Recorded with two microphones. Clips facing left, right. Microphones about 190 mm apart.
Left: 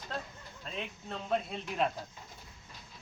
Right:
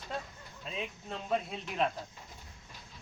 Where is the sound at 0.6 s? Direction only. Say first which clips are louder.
Right 1 dB; 5° right (ahead or behind).